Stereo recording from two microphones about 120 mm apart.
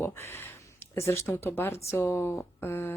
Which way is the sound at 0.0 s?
20° left (ahead or behind).